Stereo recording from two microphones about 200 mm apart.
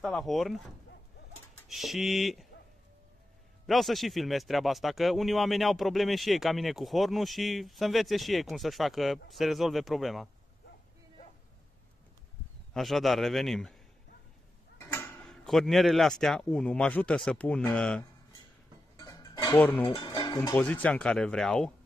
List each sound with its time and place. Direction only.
0.0 s speech: centre (ahead or behind)
1.7 s speech: centre (ahead or behind)
3.6 s speech: centre (ahead or behind)
12.7 s speech: centre (ahead or behind)
14.8 s speech: 10° left (ahead or behind)
18.9 s dishes: 15° left (ahead or behind)
20.0 s music: 20° left (ahead or behind)
20.3 s speech: 10° left (ahead or behind)